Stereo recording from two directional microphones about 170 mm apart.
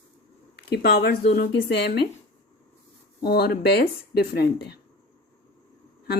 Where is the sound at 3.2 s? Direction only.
65° left (ahead or behind).